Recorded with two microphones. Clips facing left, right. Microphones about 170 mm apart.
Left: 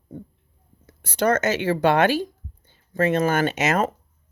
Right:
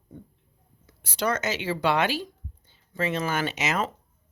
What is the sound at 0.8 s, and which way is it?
Speech, 50° left (ahead or behind).